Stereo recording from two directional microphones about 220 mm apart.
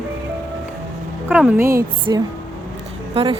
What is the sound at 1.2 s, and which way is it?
A woman's voice, 5° right (ahead or behind).